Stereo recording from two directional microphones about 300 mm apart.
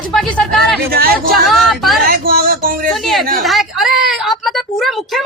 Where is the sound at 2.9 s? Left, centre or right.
Centre.